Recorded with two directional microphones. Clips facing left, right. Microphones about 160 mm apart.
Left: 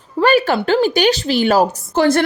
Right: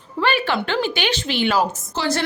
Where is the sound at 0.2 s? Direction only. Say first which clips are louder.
Left 7 dB; 40° left (ahead or behind).